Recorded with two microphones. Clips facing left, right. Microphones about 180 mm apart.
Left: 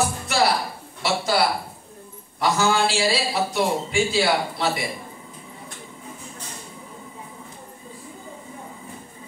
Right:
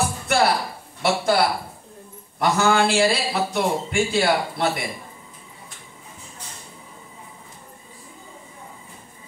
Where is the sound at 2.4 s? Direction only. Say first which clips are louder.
Right 2 dB; 55° right (ahead or behind).